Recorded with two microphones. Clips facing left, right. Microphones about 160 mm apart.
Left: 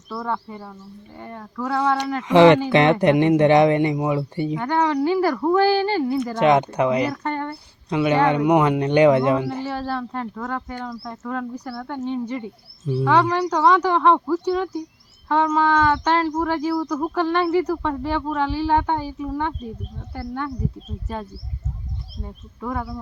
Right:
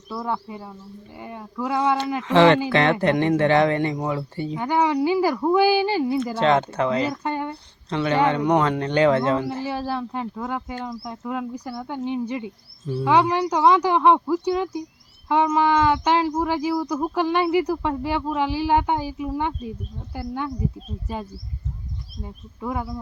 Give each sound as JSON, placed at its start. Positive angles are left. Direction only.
{"t": 0.1, "sound": "speech", "side_deg": -10}
{"t": 2.2, "sound": "speech", "side_deg": 15}
{"t": 4.5, "sound": "speech", "side_deg": -10}
{"t": 6.4, "sound": "speech", "side_deg": 15}
{"t": 7.1, "sound": "speech", "side_deg": -10}
{"t": 7.5, "sound": "speech", "side_deg": 10}
{"t": 9.6, "sound": "speech", "side_deg": -10}
{"t": 12.8, "sound": "speech", "side_deg": 5}
{"t": 13.1, "sound": "speech", "side_deg": -10}
{"t": 22.6, "sound": "speech", "side_deg": -10}